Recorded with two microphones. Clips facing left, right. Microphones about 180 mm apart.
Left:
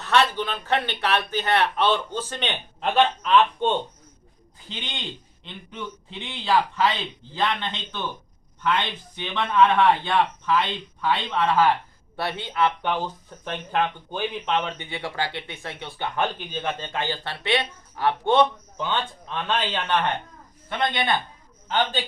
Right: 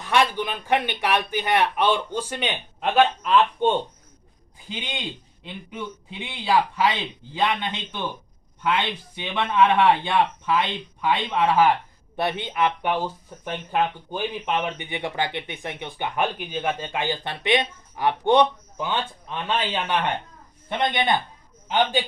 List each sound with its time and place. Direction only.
0.0 s a man's voice: 10° right (ahead or behind)